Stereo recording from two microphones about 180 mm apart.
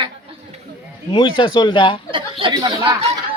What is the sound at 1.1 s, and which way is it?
Speech, 25° left (ahead or behind).